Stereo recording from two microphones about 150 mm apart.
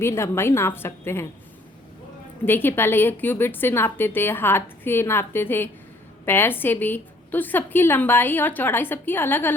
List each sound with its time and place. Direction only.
0.0 s a woman's voice: 15° left (ahead or behind)
2.4 s a woman's voice: 15° left (ahead or behind)